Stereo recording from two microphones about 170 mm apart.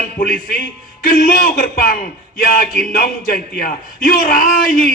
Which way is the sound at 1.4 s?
55° left (ahead or behind).